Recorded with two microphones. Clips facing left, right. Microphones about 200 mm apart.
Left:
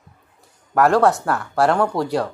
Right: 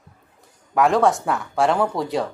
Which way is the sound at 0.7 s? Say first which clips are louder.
Left 2 dB; centre (ahead or behind).